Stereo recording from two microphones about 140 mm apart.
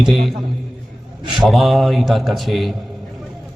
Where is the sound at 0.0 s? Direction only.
Centre (ahead or behind).